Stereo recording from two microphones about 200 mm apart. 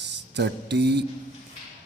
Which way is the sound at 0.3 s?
60° right (ahead or behind).